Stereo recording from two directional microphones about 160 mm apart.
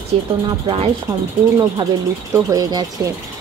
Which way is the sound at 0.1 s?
35° right (ahead or behind).